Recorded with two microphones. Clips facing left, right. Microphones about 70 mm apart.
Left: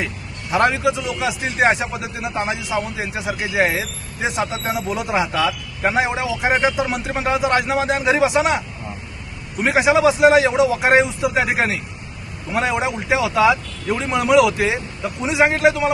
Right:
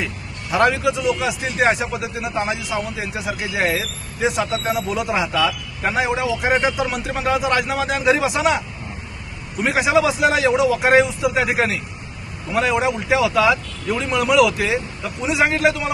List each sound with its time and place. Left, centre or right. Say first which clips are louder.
0.5 s speech: even; left
0.9 s a man's voice: right 1 dB; left
9.7 s speech: left 3 dB; left
12.7 s a man's voice: right 2 dB; left